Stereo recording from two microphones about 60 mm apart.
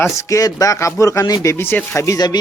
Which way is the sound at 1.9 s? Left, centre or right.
Left.